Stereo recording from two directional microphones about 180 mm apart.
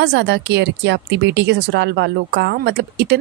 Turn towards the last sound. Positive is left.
turn(degrees=-65)  # may be behind; listen again after turning